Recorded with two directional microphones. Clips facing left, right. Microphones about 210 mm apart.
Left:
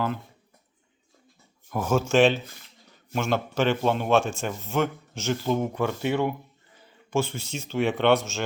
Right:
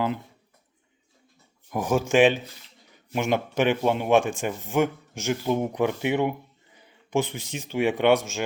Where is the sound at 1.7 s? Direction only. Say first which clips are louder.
Even; 15° right (ahead or behind).